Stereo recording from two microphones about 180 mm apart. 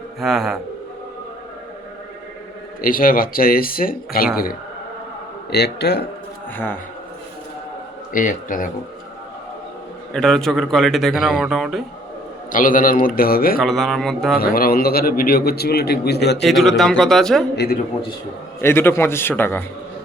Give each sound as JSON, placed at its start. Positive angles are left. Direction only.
{"t": 0.2, "sound": "a man's voice", "side_deg": 0}
{"t": 2.8, "sound": "speech", "side_deg": 50}
{"t": 5.5, "sound": "a man's voice", "side_deg": 65}
{"t": 8.1, "sound": "speech", "side_deg": 50}
{"t": 10.1, "sound": "a man's voice", "side_deg": 5}
{"t": 12.5, "sound": "speech", "side_deg": 50}
{"t": 13.6, "sound": "a man's voice", "side_deg": 0}
{"t": 14.3, "sound": "a man's voice", "side_deg": 55}
{"t": 16.4, "sound": "a man's voice", "side_deg": 0}
{"t": 18.6, "sound": "a man's voice", "side_deg": 15}